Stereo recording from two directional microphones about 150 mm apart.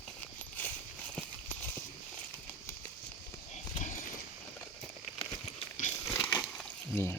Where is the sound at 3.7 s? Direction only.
55° left (ahead or behind).